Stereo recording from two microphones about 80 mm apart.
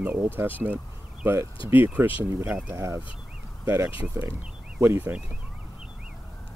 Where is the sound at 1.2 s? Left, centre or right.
Right.